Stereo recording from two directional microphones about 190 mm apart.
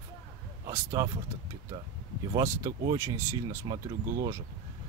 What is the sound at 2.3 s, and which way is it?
Speech, 20° right (ahead or behind).